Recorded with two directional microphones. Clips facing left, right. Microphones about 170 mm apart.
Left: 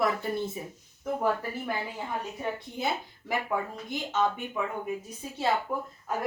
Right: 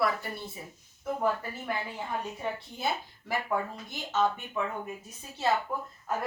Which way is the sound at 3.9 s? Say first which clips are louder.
Left 1 dB; 15° left (ahead or behind).